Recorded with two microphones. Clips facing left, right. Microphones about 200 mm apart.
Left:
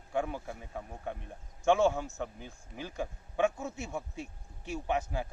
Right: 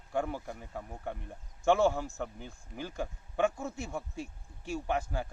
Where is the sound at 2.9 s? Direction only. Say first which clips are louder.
Even; centre (ahead or behind).